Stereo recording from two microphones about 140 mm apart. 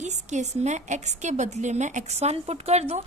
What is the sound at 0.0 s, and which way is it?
A woman's voice, 55° right (ahead or behind).